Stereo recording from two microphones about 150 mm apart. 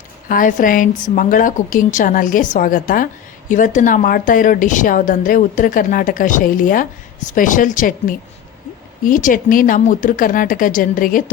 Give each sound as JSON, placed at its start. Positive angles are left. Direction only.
{"t": 0.3, "sound": "a woman's voice", "side_deg": 60}